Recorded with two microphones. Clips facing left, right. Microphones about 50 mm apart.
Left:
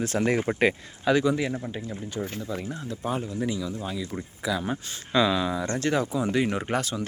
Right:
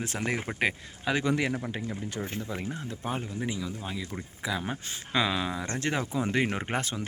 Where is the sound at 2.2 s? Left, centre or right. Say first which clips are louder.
Left 6 dB; centre.